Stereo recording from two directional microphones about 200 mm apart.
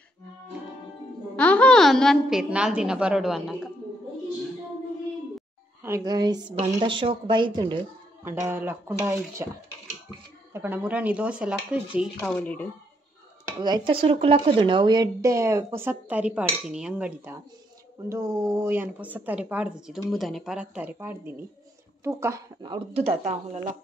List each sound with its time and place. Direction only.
1.3 s a woman's voice: 5° left (ahead or behind)
5.8 s speech: 15° right (ahead or behind)
12.2 s speech: 5° left (ahead or behind)
13.6 s speech: 20° right (ahead or behind)